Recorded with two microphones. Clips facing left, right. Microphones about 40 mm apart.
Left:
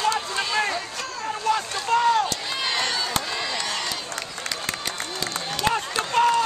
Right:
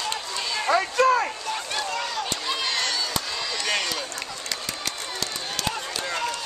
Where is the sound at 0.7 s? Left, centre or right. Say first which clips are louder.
Right 11 dB; right.